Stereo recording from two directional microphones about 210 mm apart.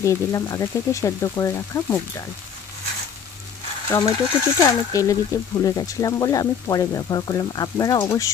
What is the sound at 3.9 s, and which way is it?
Speech, 10° left (ahead or behind).